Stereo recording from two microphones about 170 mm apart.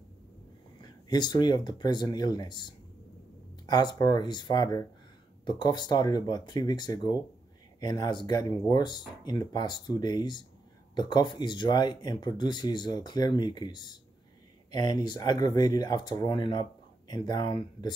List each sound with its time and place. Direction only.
0.7 s speech: 25° left (ahead or behind)